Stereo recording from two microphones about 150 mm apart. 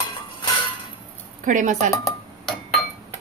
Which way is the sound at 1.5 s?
60° right (ahead or behind).